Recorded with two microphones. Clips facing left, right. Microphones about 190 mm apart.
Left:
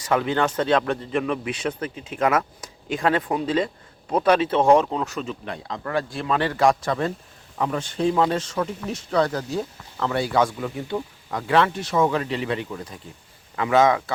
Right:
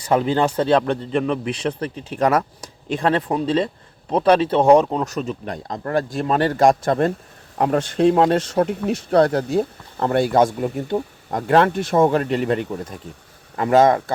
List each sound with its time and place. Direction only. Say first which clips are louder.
0.0 s a man's voice: right 4 dB; 30° right (ahead or behind); by 7.1 s 50° right (ahead or behind)
7.6 s a man's voice: right 6 dB; 65° right (ahead or behind); by 14.0 s 45° right (ahead or behind)